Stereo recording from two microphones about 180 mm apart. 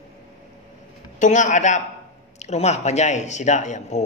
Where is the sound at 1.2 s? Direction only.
40° left (ahead or behind).